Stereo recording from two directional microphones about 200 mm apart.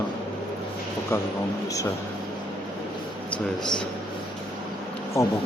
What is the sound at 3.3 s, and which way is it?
Speech, 20° left (ahead or behind).